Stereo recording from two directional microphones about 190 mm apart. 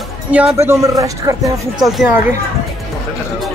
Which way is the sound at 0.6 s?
15° right (ahead or behind).